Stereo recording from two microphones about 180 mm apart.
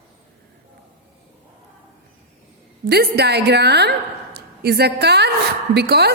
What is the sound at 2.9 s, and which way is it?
A woman's voice, 65° right (ahead or behind).